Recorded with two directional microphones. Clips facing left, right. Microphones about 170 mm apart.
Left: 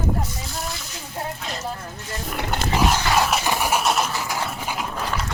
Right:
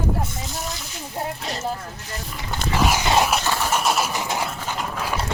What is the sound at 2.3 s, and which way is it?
Roaring cats, 65° left (ahead or behind).